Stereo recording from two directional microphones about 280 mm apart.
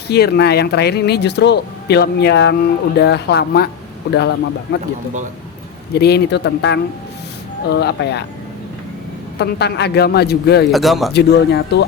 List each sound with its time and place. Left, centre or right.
0.1 s speech: left
5.9 s speech: left
9.4 s speech: left
10.7 s speech: centre
11.1 s speech: left